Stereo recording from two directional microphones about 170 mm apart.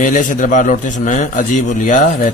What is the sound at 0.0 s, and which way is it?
A man's voice, 50° left (ahead or behind).